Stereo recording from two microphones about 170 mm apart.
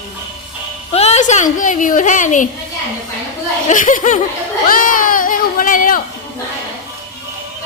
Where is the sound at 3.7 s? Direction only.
50° left (ahead or behind).